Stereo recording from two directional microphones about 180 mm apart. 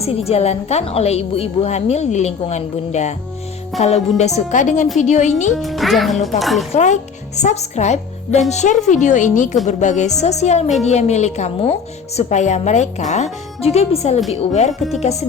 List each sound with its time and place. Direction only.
0.0 s a woman's voice: 35° left (ahead or behind)
5.5 s a child's voice: centre (ahead or behind)
6.7 s a woman's voice: 40° left (ahead or behind)
14.7 s a child's voice: centre (ahead or behind)
15.0 s a woman's voice: 35° left (ahead or behind)